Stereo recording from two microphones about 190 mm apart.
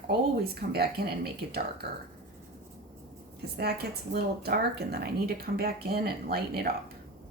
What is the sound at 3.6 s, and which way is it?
Speech, 55° right (ahead or behind).